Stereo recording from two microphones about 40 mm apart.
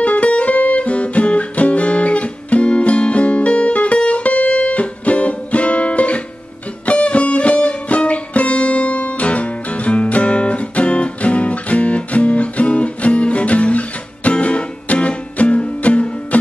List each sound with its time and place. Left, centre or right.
0.0 s music: left